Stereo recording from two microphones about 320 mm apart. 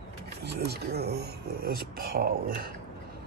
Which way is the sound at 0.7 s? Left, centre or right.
Right.